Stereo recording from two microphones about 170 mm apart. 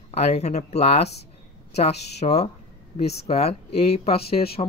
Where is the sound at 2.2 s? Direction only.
40° left (ahead or behind).